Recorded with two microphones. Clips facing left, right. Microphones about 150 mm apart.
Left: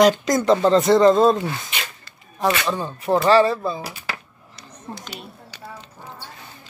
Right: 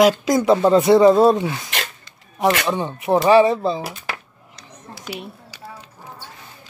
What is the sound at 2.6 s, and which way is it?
Speech, 15° right (ahead or behind).